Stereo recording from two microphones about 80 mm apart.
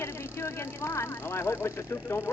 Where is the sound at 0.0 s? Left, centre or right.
Left.